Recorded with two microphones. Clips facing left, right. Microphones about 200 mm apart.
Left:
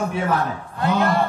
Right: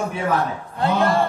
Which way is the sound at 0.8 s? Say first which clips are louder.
Right 1 dB; 30° right (ahead or behind).